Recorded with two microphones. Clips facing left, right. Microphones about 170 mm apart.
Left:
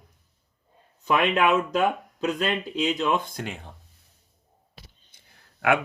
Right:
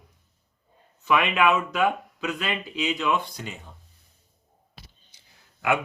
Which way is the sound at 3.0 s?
45° left (ahead or behind).